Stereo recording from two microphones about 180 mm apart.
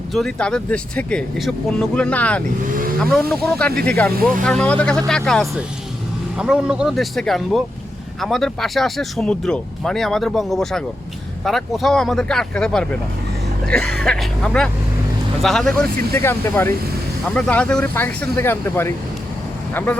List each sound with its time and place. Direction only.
0.1 s speech: centre (ahead or behind)
4.1 s speech: 50° right (ahead or behind)
4.4 s speech: 5° left (ahead or behind)